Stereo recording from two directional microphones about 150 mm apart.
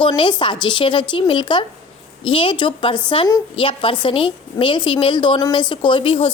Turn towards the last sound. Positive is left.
turn(degrees=35)  # may be behind; listen again after turning